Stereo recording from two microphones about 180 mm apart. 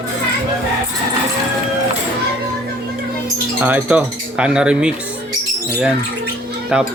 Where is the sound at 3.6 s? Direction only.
10° right (ahead or behind).